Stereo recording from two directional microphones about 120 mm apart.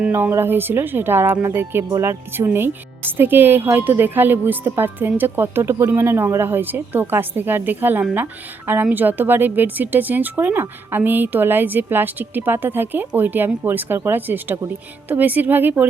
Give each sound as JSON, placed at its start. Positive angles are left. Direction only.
{"t": 0.0, "sound": "speech", "side_deg": -15}